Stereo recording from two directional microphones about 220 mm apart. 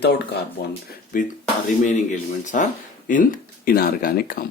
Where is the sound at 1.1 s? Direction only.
40° left (ahead or behind).